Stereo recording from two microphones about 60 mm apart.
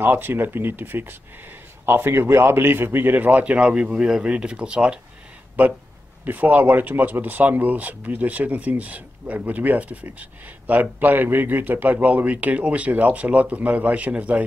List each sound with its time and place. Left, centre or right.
0.0 s a man's voice: right; by 4.9 s centre
6.2 s a man's voice: right